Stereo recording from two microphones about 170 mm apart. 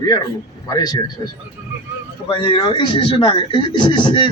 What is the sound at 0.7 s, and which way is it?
Speech, 25° left (ahead or behind).